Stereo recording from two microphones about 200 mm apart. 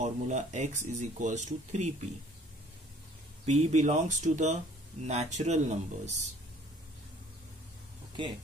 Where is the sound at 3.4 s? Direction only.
35° right (ahead or behind).